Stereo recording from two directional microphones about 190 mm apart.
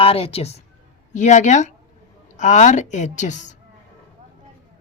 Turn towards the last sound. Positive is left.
turn(degrees=40)  # may be behind; listen again after turning